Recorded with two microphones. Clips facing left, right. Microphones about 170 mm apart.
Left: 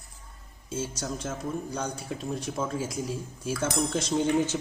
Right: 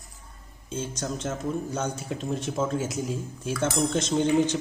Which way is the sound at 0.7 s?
5° left (ahead or behind).